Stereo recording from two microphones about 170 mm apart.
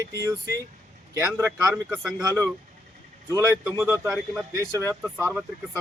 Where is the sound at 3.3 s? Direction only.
15° right (ahead or behind).